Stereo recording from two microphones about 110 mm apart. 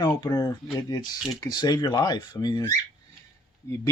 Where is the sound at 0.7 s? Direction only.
40° left (ahead or behind).